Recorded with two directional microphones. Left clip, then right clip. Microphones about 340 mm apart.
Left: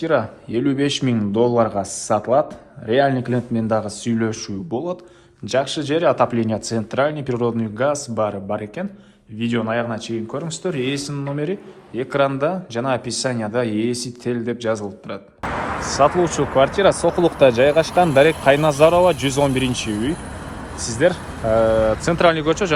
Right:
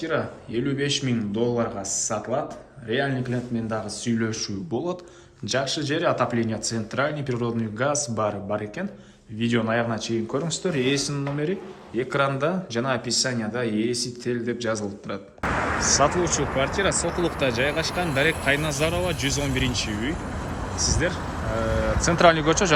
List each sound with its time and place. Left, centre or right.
0.0 s speech: centre
15.4 s a sound: left
16.0 s speech: centre
18.0 s speech: left
18.7 s speech: centre